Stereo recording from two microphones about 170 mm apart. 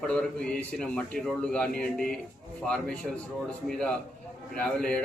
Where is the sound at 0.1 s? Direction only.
5° left (ahead or behind).